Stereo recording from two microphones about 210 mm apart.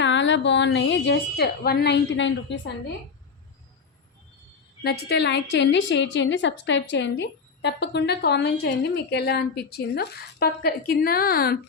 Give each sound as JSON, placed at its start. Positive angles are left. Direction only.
{"t": 0.0, "sound": "a woman's voice", "side_deg": 60}
{"t": 4.8, "sound": "a woman's voice", "side_deg": 50}